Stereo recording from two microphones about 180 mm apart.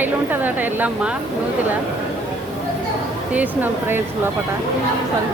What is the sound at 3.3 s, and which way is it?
Speech, 10° right (ahead or behind).